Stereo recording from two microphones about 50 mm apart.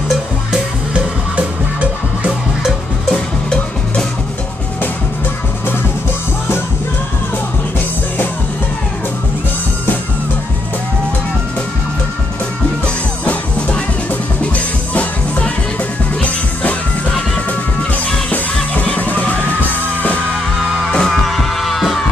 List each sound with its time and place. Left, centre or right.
3.1 s music: centre
13.2 s music: left
18.3 s music: left
20.9 s music: centre
21.3 s music: centre